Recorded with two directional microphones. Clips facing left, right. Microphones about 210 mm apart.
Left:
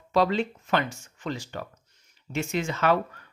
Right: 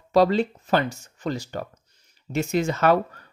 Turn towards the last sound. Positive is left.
turn(degrees=-40)  # may be behind; listen again after turning